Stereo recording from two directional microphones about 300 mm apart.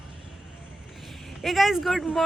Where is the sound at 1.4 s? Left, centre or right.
Centre.